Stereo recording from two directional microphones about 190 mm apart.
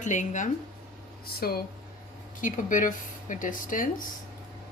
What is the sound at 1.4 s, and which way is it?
A woman's voice, 50° left (ahead or behind).